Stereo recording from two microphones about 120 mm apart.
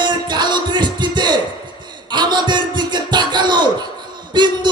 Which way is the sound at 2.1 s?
40° right (ahead or behind).